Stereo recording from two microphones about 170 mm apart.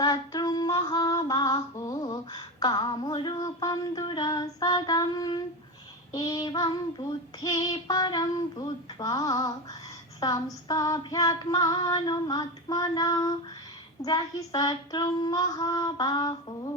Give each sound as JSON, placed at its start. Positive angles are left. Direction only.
{"t": 0.0, "sound": "female singing", "side_deg": 25}